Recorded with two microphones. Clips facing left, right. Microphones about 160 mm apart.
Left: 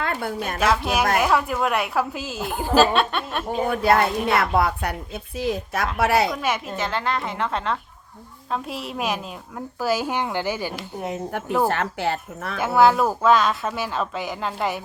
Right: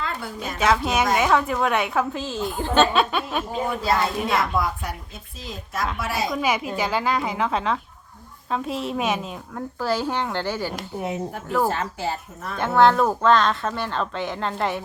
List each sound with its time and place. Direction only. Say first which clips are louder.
0.0 s a woman's voice: left 4 dB; 60° left (ahead or behind)
0.6 s a woman's voice: right 1 dB; 5° left (ahead or behind)
3.7 s a woman's voice: left 5 dB; 60° left (ahead or behind)
6.3 s a woman's voice: right 2 dB; centre (ahead or behind)
11.3 s a woman's voice: left 3 dB; 70° left (ahead or behind)
12.5 s a woman's voice: even; 5° left (ahead or behind)